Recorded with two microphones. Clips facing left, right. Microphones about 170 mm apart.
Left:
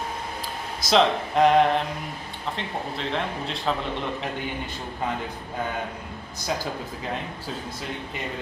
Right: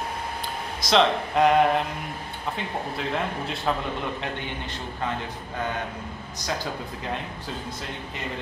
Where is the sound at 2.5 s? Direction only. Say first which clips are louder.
Right 1 dB; 5° right (ahead or behind).